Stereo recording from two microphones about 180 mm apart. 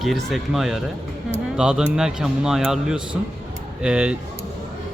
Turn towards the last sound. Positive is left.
turn(degrees=-5)  # may be behind; listen again after turning